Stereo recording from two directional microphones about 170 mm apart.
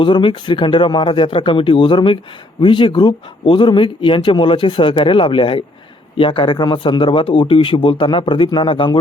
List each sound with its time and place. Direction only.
0.0 s speech: 30° left (ahead or behind)